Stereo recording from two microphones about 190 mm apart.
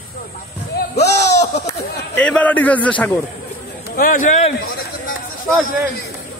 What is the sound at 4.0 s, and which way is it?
Speech, 45° left (ahead or behind).